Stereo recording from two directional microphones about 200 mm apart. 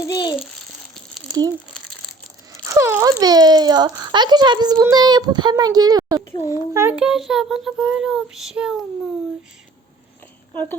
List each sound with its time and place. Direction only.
0.1 s babbling: 20° left (ahead or behind)
2.6 s a child's voice: 15° right (ahead or behind)
10.5 s speech: 10° left (ahead or behind)